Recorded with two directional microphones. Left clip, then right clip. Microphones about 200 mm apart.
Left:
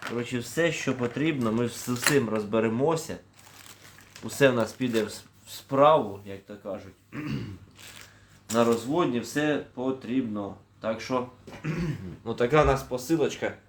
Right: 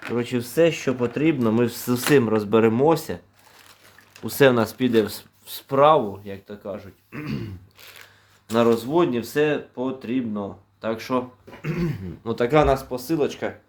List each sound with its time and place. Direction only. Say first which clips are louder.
0.2 s speech: right 7 dB; 45° right (ahead or behind)
4.3 s speech: right 5 dB; 60° right (ahead or behind)
8.5 s speech: right 5 dB; 55° right (ahead or behind)
12.3 s speech: right 4 dB; 35° right (ahead or behind)